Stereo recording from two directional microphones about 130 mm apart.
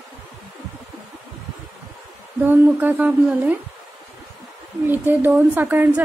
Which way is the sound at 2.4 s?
15° right (ahead or behind).